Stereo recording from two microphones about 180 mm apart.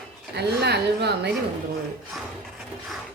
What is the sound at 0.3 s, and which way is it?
Speech, 65° right (ahead or behind).